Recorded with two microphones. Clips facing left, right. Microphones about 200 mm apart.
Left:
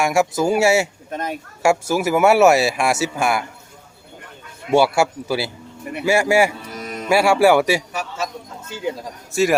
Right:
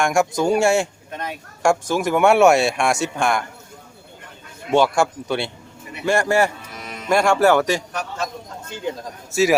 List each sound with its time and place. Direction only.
0.0 s speech: 5° left (ahead or behind)
1.1 s speech: 45° left (ahead or behind)
1.6 s speech: 5° left (ahead or behind)
4.7 s a man's voice: 10° left (ahead or behind)
6.7 s music: 40° left (ahead or behind)
7.1 s a man's voice: 5° left (ahead or behind)